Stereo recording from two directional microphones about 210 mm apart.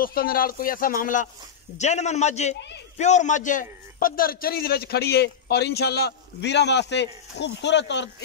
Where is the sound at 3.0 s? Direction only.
35° left (ahead or behind); by 8.1 s 55° left (ahead or behind).